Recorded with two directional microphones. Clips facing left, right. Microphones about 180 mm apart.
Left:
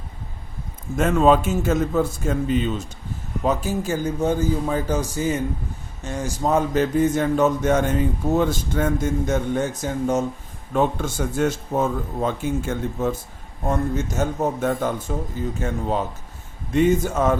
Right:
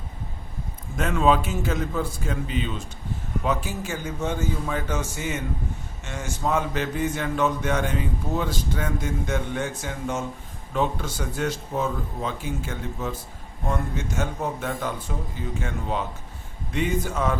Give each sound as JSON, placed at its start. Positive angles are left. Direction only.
{"t": 0.9, "sound": "a man's voice", "side_deg": 45}